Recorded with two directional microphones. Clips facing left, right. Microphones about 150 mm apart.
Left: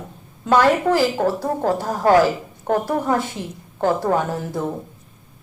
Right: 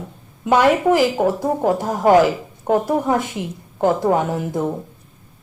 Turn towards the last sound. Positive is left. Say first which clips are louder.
# right 3 dB
turn(degrees=-15)  # may be behind; listen again after turning